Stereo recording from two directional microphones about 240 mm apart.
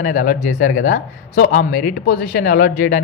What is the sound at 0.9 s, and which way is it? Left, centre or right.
A man's voice, left.